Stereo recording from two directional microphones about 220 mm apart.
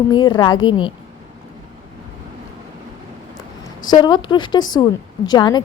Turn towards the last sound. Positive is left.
turn(degrees=20)  # may be behind; listen again after turning